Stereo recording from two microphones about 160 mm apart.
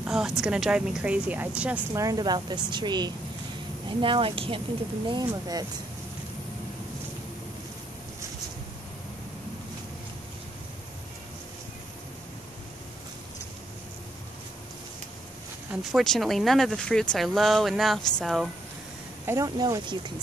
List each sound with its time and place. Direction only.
0.0 s a sound: 5° right (ahead or behind)
0.4 s a woman's voice: 5° right (ahead or behind)
2.0 s speech: 25° right (ahead or behind)
15.7 s speech: centre (ahead or behind)
19.2 s speech: 20° right (ahead or behind)